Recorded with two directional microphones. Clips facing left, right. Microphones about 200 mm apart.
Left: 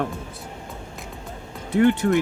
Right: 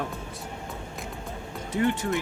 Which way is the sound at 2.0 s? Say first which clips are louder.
Left 8 dB; 50° left (ahead or behind).